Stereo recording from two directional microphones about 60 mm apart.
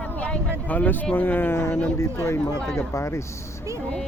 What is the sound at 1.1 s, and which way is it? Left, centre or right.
Speech, left.